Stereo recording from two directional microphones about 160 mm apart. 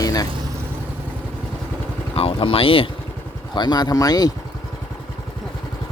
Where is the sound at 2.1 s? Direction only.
35° left (ahead or behind).